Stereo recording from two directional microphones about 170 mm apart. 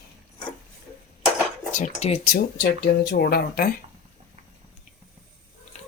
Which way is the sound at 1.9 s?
40° left (ahead or behind).